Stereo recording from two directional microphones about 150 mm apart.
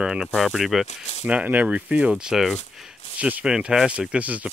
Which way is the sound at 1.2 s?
10° right (ahead or behind).